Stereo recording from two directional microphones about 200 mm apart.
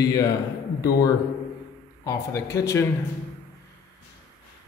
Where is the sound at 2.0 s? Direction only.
15° left (ahead or behind).